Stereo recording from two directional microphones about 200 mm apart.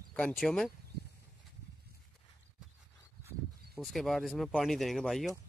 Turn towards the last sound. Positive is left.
turn(degrees=0)  # may be behind; listen again after turning